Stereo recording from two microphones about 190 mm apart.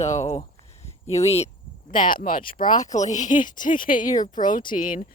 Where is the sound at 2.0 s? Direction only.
45° left (ahead or behind).